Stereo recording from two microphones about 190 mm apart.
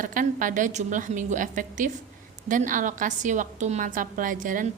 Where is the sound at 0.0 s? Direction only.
45° right (ahead or behind).